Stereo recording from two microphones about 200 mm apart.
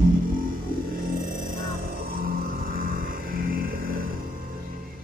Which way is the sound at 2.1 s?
45° right (ahead or behind).